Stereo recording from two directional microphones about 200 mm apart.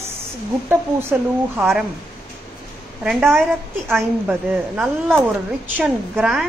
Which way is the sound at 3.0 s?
5° right (ahead or behind).